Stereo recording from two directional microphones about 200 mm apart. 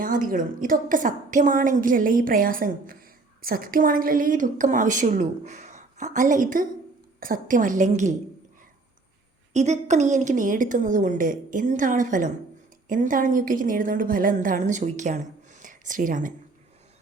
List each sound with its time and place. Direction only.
0.0 s a woman's voice: 45° right (ahead or behind)
9.5 s a woman's voice: 35° right (ahead or behind)